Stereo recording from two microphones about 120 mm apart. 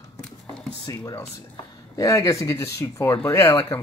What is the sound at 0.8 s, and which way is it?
Speech, 25° left (ahead or behind).